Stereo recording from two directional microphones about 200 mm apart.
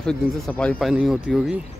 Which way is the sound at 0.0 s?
5° left (ahead or behind).